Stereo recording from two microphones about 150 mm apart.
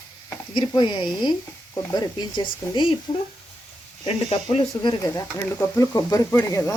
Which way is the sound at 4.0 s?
45° left (ahead or behind).